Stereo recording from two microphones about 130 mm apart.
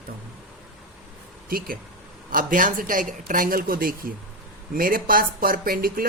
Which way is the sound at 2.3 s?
90° right.